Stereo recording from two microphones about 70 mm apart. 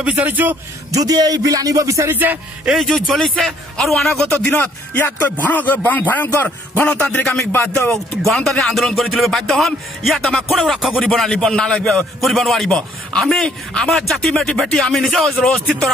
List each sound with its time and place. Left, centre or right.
0.0 s a man's voice: right
0.9 s speech: right
2.8 s a man's voice: centre
4.5 s a man's voice: left
8.5 s a man's voice: centre
12.2 s a man's voice: centre